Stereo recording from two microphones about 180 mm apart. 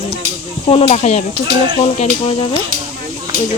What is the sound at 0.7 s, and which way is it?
Speech, 35° left (ahead or behind).